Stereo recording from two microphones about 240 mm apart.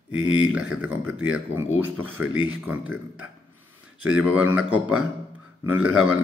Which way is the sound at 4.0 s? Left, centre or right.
Centre.